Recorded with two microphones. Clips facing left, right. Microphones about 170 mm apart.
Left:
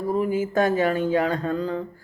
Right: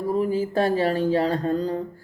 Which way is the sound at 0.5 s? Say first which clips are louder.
Left 1 dB; 30° right (ahead or behind).